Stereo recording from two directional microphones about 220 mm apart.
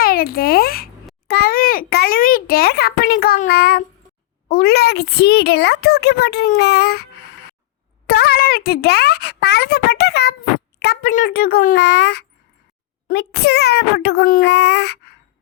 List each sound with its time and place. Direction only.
0.0 s a child's voice: 40° left (ahead or behind)
8.0 s a child's voice: 45° left (ahead or behind)